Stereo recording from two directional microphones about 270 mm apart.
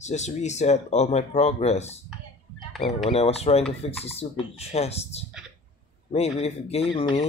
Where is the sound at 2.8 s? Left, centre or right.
Left.